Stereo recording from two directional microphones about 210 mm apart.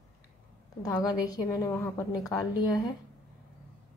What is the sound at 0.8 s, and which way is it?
A woman's voice, 15° left (ahead or behind).